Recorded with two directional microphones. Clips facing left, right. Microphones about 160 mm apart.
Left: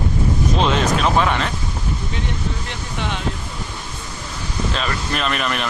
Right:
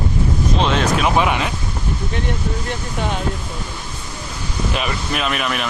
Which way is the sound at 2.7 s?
45° right (ahead or behind).